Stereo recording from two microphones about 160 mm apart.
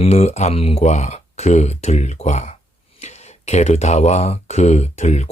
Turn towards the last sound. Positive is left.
turn(degrees=45)  # may be behind; listen again after turning